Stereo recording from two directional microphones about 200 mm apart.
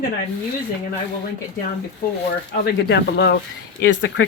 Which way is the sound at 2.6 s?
60° left (ahead or behind).